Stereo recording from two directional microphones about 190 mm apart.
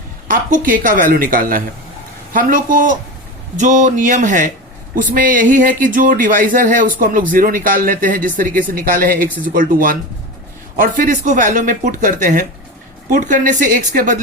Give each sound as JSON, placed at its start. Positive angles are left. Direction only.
{"t": 0.3, "sound": "speech", "side_deg": -45}